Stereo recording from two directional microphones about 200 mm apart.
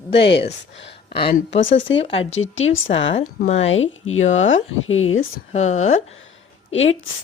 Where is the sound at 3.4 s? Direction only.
30° left (ahead or behind).